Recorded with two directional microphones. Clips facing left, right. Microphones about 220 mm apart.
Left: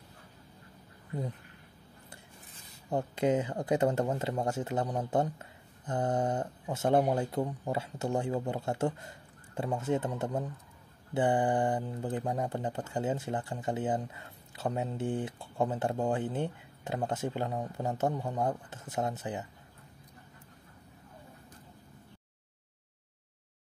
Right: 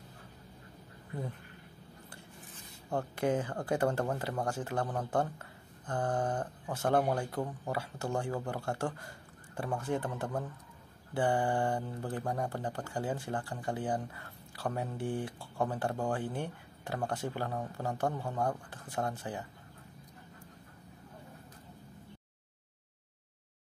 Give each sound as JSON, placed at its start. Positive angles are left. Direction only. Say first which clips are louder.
{"t": 2.9, "sound": "speech", "louder": "left 3 dB", "side_deg": 20}